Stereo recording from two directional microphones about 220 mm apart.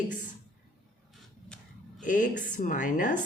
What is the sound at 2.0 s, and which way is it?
A woman's voice, 35° left (ahead or behind).